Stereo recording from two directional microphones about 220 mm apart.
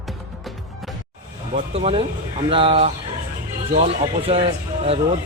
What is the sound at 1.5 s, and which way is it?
A man's voice, 30° right (ahead or behind).